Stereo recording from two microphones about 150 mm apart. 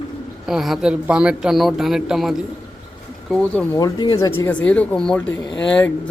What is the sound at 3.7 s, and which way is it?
Speech, 25° left (ahead or behind).